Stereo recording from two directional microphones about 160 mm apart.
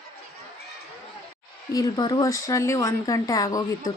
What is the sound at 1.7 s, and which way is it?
Speech, 25° left (ahead or behind).